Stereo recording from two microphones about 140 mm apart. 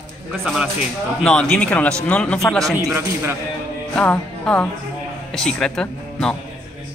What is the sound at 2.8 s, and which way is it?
Speech, 15° right (ahead or behind).